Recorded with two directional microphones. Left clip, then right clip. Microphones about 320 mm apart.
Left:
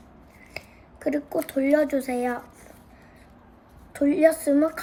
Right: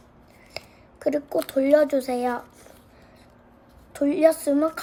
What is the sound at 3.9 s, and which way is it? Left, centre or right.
Speech, centre.